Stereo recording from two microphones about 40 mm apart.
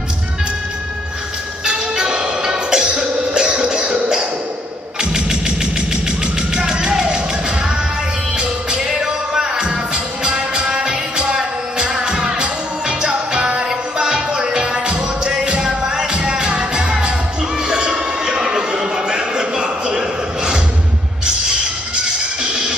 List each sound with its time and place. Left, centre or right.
1.7 s music: centre
6.5 s music: centre
8.4 s music: centre
16.1 s music: right
17.6 s a sound: right
22.4 s music: right